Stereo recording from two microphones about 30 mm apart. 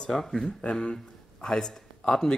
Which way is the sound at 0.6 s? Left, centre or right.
Left.